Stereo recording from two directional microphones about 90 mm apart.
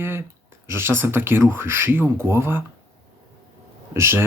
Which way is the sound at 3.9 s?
30° right (ahead or behind).